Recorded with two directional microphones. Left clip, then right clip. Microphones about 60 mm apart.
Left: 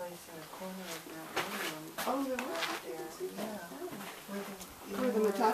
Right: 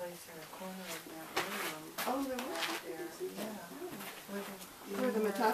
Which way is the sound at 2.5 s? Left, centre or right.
Right.